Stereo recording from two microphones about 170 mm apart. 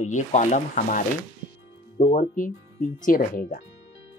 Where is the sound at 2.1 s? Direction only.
50° left (ahead or behind).